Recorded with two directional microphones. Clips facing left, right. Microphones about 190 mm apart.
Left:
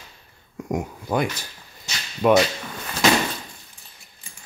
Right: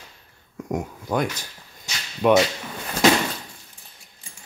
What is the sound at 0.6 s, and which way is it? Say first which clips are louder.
Speech: left 1 dB; 10° left (ahead or behind).